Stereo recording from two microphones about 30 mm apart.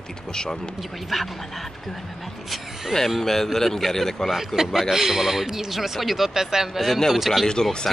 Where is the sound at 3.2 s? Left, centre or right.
Centre.